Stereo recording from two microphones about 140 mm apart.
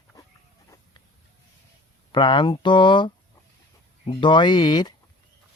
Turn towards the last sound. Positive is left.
turn(degrees=30)  # may be behind; listen again after turning